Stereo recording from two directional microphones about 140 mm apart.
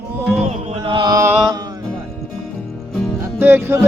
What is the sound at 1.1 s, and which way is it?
Mantra, 20° right (ahead or behind).